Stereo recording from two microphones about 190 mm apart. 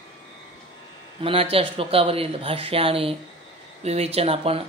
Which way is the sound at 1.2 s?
30° right (ahead or behind).